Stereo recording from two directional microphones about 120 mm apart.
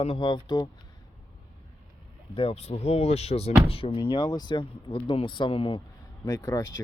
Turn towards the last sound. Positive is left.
turn(degrees=30)  # may be behind; listen again after turning